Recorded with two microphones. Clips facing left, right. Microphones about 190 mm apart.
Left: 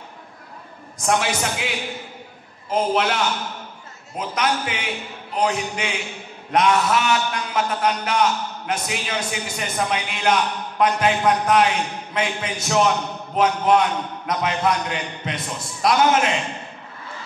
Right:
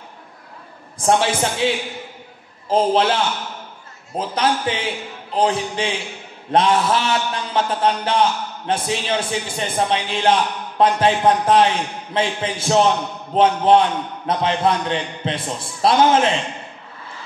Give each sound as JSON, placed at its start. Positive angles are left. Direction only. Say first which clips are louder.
{"t": 0.9, "sound": "a man's voice", "louder": "right 4 dB", "side_deg": -30}
{"t": 2.7, "sound": "a man's voice", "louder": "right 4 dB", "side_deg": -30}